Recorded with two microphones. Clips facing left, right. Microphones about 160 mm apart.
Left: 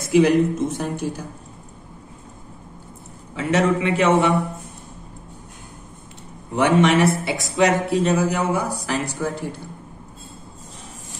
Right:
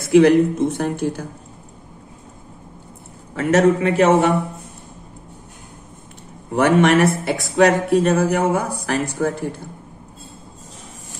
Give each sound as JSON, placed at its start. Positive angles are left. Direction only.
{"t": 0.1, "sound": "speech", "side_deg": -60}
{"t": 3.3, "sound": "a man's voice", "side_deg": -45}
{"t": 6.5, "sound": "speech", "side_deg": -55}